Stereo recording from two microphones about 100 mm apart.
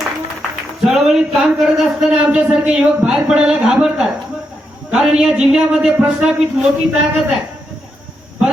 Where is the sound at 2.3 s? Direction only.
10° right (ahead or behind).